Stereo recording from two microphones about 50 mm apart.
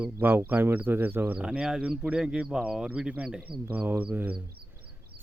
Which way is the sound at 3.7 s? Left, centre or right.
Right.